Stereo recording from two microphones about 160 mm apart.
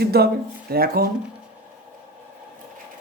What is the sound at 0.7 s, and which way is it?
Speech, 70° right (ahead or behind).